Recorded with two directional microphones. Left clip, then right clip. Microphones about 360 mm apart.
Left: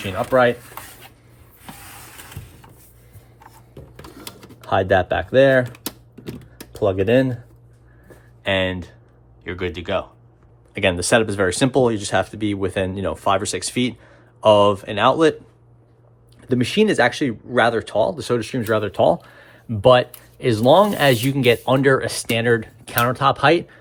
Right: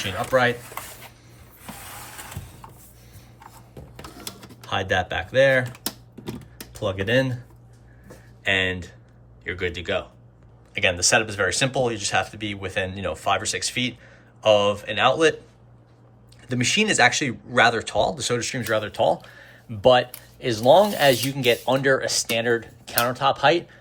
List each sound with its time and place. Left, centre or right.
0.0 s speech: centre
3.9 s typing: centre
8.4 s speech: centre
16.5 s speech: centre